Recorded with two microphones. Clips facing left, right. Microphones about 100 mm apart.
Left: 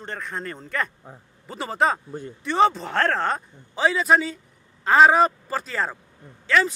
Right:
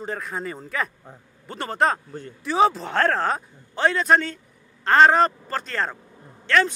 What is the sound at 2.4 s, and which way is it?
Speech, centre (ahead or behind).